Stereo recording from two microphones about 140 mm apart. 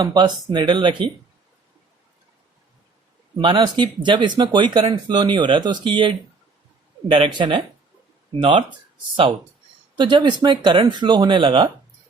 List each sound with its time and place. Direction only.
0.0 s speech: 30° right (ahead or behind)
3.3 s speech: 35° right (ahead or behind)
10.0 s speech: 35° right (ahead or behind)